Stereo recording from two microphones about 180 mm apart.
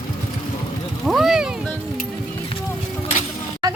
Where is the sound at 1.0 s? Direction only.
Centre (ahead or behind).